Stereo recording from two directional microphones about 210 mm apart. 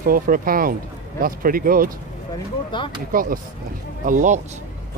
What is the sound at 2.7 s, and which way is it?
Speech, 20° left (ahead or behind).